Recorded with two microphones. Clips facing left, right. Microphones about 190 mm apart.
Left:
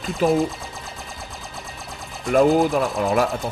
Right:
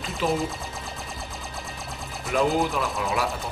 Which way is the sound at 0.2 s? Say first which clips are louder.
Left 6 dB; 45° left (ahead or behind).